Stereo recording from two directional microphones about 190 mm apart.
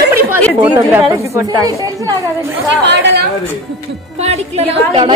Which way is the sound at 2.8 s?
65° right (ahead or behind).